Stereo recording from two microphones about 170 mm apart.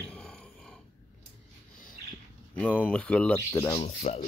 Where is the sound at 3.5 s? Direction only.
30° left (ahead or behind).